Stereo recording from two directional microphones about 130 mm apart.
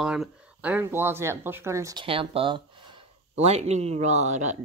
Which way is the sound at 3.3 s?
55° right (ahead or behind).